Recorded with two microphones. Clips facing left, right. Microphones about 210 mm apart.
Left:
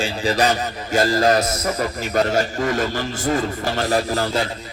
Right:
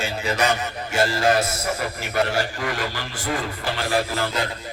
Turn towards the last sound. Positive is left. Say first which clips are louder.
# left 4 dB
turn(degrees=40)  # may be behind; listen again after turning